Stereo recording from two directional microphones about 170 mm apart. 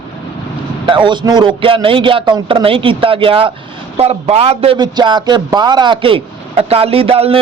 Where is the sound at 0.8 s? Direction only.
30° right (ahead or behind).